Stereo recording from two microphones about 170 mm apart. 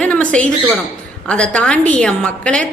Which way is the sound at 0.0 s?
10° left (ahead or behind).